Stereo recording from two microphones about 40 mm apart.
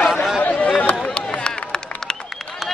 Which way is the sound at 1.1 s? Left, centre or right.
Left.